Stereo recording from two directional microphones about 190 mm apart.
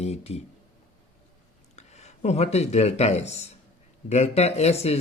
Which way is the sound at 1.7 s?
35° left (ahead or behind).